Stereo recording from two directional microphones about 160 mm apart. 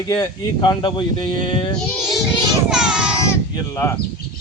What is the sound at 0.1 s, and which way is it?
Speech, 25° left (ahead or behind).